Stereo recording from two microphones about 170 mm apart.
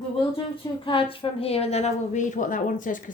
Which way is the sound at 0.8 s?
30° left (ahead or behind).